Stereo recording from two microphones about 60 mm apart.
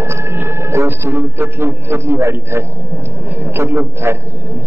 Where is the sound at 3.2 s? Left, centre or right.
Right.